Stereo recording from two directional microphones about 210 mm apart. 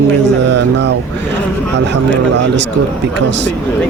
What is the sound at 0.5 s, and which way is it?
Speech, 55° right (ahead or behind).